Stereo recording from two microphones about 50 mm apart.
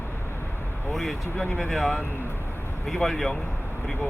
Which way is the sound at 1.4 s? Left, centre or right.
Centre.